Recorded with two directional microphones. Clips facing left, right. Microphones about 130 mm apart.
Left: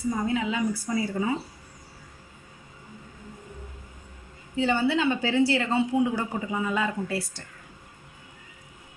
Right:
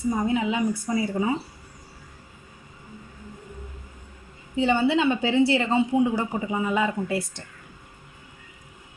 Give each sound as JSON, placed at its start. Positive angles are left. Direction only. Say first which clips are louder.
{"t": 0.2, "sound": "speech", "louder": "right 3 dB", "side_deg": -20}
{"t": 4.5, "sound": "speech", "louder": "right 3 dB", "side_deg": -20}